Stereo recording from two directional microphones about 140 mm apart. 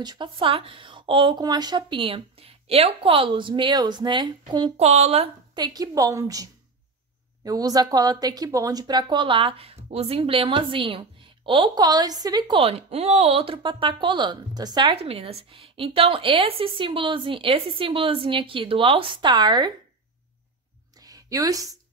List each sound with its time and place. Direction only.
0.0 s a woman's voice: 35° right (ahead or behind)
4.7 s speech: 50° right (ahead or behind)
5.5 s a woman's voice: 30° right (ahead or behind)
15.0 s a woman's voice: 45° right (ahead or behind)
21.0 s a sound: 25° right (ahead or behind)